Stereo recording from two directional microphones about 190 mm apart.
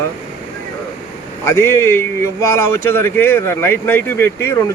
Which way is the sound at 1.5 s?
15° left (ahead or behind).